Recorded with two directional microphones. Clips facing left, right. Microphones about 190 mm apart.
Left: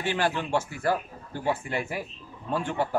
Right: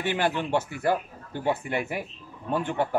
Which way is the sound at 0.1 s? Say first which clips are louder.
Right 1 dB; 15° right (ahead or behind).